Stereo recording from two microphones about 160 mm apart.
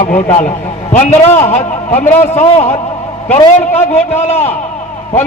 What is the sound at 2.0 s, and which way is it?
A man's voice, 15° left (ahead or behind).